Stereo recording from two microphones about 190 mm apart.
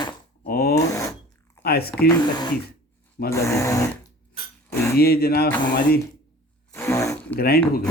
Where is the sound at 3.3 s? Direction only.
15° left (ahead or behind).